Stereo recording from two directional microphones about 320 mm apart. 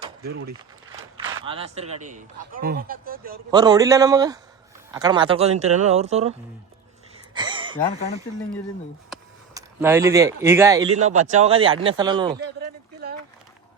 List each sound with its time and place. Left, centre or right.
0.2 s speech: right
1.5 s speech: centre
3.5 s speech: centre
7.3 s gasp: centre
9.6 s speech: centre
10.9 s speech: right